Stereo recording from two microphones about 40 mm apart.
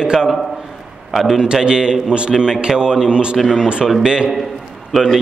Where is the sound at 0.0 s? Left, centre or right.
Centre.